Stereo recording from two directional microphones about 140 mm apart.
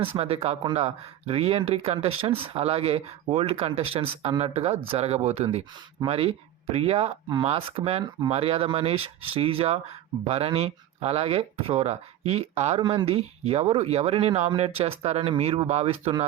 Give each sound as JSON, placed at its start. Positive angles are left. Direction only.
{"t": 0.2, "sound": "speech", "side_deg": -45}